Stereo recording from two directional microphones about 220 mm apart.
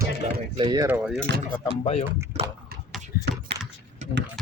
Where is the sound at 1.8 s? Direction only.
25° left (ahead or behind).